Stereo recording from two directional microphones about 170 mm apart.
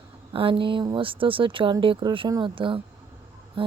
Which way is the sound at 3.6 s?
30° right (ahead or behind).